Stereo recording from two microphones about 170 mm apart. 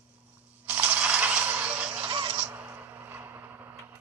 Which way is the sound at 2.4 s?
10° right (ahead or behind).